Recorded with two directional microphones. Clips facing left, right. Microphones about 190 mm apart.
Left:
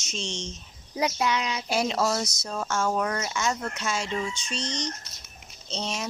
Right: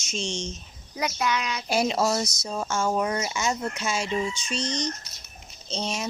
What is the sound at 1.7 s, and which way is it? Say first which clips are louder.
Speech: right 2 dB; 5° right (ahead or behind).